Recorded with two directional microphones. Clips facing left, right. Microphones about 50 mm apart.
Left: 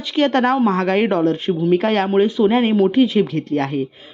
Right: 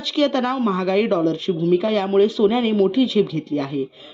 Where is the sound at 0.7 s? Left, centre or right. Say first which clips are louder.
Left 2 dB; left.